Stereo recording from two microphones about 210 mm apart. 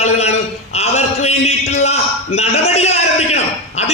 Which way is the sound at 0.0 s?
30° left (ahead or behind).